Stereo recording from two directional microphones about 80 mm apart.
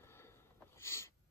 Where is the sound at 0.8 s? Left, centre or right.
Left.